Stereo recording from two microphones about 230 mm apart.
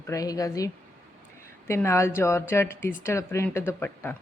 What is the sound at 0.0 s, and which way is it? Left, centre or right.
Speech, centre.